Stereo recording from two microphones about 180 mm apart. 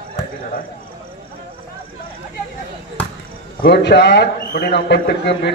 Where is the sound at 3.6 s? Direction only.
65° left (ahead or behind).